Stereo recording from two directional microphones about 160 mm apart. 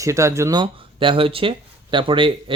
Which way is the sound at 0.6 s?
30° right (ahead or behind).